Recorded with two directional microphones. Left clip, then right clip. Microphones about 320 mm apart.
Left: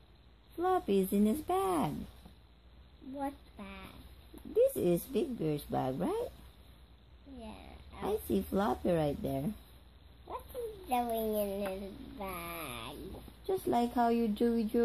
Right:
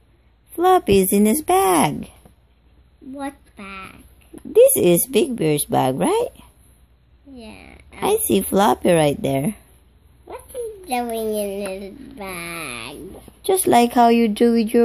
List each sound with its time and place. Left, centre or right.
0.6 s a woman's voice: right
3.2 s a sound: right
4.6 s a woman's voice: right
7.3 s a woman's voice: centre
10.9 s a woman's voice: right